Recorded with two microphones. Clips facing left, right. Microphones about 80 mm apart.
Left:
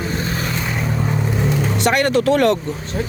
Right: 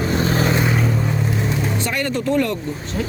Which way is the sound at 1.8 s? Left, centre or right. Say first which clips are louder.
Left 6 dB; left.